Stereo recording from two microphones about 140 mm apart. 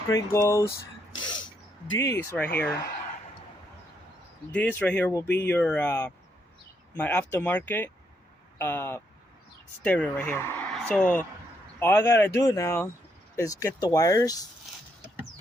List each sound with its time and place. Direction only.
0.1 s speech: 25° left (ahead or behind)
1.2 s throat clearing: 30° left (ahead or behind)
2.0 s speech: 20° left (ahead or behind)
4.5 s speech: 10° left (ahead or behind)